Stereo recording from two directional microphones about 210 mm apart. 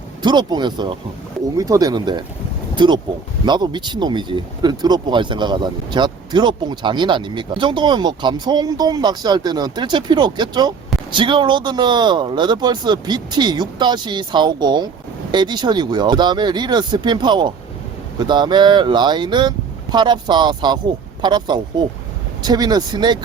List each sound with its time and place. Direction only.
0.2 s speech: 20° right (ahead or behind)